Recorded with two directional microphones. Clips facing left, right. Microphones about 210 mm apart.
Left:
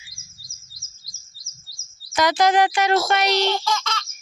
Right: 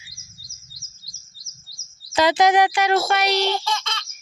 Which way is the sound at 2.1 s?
25° right (ahead or behind).